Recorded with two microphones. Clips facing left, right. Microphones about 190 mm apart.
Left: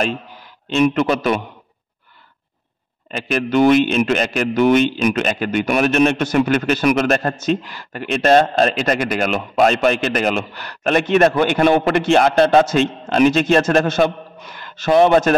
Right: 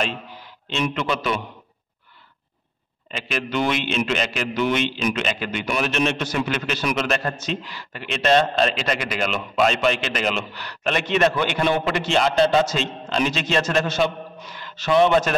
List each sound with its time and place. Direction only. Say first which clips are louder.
0.7 s a man's voice: left 8 dB; 45° left (ahead or behind)
3.1 s a man's voice: left 7 dB; 45° left (ahead or behind)